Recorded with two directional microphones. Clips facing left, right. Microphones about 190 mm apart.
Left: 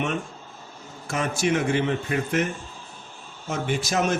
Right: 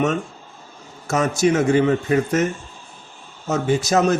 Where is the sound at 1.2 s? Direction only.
40° right (ahead or behind).